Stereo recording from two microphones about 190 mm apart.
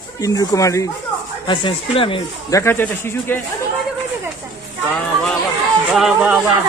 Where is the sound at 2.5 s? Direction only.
15° left (ahead or behind).